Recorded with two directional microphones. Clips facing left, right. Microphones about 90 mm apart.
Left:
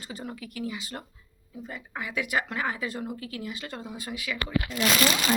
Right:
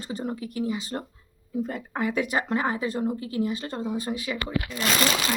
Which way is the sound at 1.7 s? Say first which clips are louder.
Right 4 dB; 45° right (ahead or behind).